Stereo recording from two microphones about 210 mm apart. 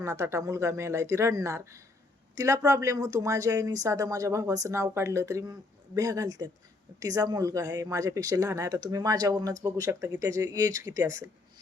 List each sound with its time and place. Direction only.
0.0 s speech: 15° right (ahead or behind)